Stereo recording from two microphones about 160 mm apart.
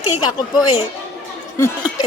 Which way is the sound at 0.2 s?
25° left (ahead or behind).